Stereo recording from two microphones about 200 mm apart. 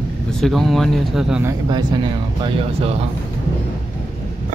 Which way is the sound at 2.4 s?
30° right (ahead or behind).